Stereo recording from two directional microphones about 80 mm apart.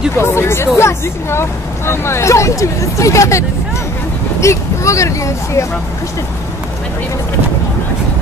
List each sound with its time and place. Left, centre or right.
0.1 s speech: left